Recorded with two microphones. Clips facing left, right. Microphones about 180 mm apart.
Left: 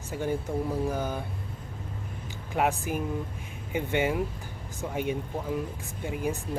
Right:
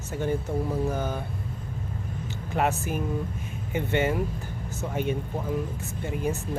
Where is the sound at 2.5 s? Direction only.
10° left (ahead or behind).